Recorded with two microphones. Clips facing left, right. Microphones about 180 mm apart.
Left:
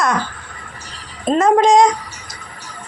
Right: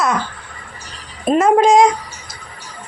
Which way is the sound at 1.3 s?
10° right (ahead or behind).